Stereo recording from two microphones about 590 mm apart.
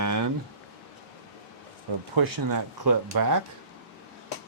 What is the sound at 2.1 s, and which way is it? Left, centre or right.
Speech, right.